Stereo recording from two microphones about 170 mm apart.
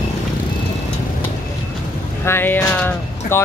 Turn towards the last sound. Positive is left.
turn(degrees=10)  # may be behind; listen again after turning